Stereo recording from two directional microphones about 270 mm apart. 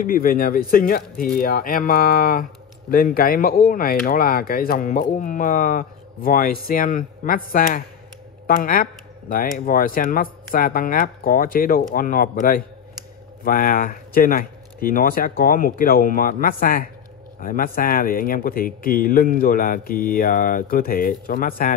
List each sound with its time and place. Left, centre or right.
0.0 s speech: left